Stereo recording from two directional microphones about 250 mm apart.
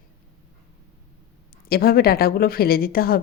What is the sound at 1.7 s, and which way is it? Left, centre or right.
Speech, left.